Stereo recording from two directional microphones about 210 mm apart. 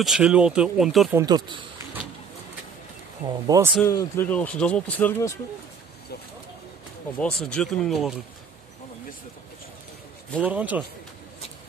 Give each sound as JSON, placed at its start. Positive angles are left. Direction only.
{"t": 0.0, "sound": "speech", "side_deg": -5}
{"t": 1.1, "sound": "speech", "side_deg": -20}
{"t": 3.4, "sound": "speech", "side_deg": -15}
{"t": 3.8, "sound": "speech", "side_deg": 10}
{"t": 7.2, "sound": "speech", "side_deg": 5}
{"t": 10.4, "sound": "speech", "side_deg": -5}